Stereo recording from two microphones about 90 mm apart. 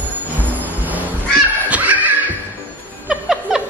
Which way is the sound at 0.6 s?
20° right (ahead or behind).